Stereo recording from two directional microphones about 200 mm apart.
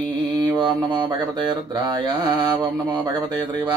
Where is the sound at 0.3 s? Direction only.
20° right (ahead or behind).